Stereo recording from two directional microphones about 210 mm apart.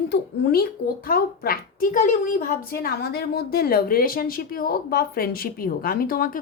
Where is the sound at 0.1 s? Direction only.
45° left (ahead or behind).